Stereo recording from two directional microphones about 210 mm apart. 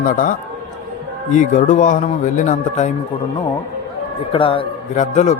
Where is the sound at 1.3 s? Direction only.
35° left (ahead or behind).